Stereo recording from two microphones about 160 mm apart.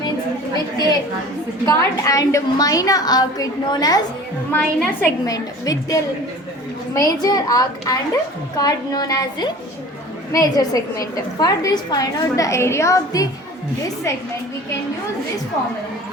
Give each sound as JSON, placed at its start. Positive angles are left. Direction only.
{"t": 0.5, "sound": "chatter", "side_deg": 25}
{"t": 1.6, "sound": "a woman's voice", "side_deg": 20}
{"t": 4.5, "sound": "a woman's voice", "side_deg": 10}
{"t": 5.2, "sound": "a woman's voice", "side_deg": 20}